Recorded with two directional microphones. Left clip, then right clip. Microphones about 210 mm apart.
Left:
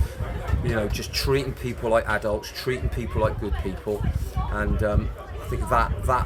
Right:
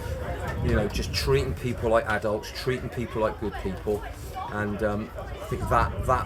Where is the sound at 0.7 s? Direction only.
20° left (ahead or behind).